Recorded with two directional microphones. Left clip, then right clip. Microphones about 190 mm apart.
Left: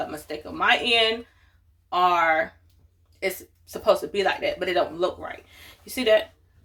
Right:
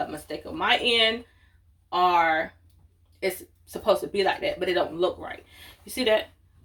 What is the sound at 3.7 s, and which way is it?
Speech, 20° left (ahead or behind).